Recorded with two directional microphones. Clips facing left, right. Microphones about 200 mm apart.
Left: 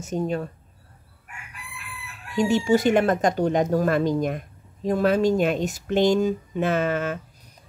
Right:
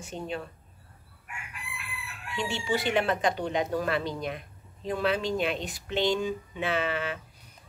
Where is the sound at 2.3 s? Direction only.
45° left (ahead or behind).